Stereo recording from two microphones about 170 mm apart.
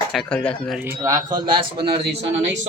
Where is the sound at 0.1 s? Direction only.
5° left (ahead or behind).